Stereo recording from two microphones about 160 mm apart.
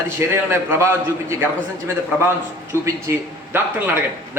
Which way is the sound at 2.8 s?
15° right (ahead or behind).